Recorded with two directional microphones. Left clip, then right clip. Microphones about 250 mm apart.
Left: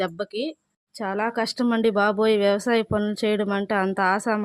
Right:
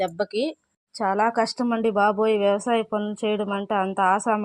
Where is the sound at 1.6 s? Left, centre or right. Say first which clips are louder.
Left 2 dB; left.